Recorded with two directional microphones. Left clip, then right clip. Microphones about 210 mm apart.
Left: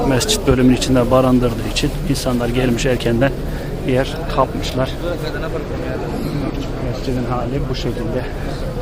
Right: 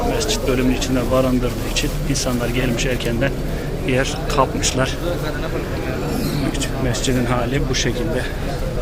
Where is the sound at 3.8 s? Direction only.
10° left (ahead or behind).